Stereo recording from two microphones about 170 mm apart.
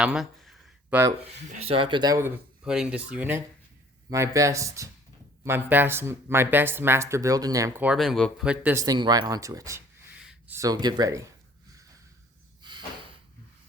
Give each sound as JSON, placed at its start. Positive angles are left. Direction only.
{"t": 0.0, "sound": "a sound", "side_deg": -5}
{"t": 1.5, "sound": "speech", "side_deg": -35}
{"t": 2.6, "sound": "speech", "side_deg": -5}
{"t": 7.9, "sound": "speech", "side_deg": 0}
{"t": 8.7, "sound": "speech", "side_deg": -20}
{"t": 10.2, "sound": "a sound", "side_deg": -5}
{"t": 10.6, "sound": "speech", "side_deg": -25}